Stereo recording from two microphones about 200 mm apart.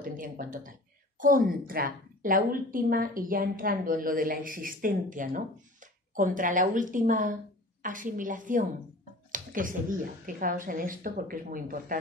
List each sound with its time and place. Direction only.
0.0 s a woman's voice: 45° right (ahead or behind)